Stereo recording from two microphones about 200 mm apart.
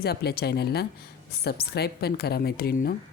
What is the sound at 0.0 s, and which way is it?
A woman's voice, 55° left (ahead or behind).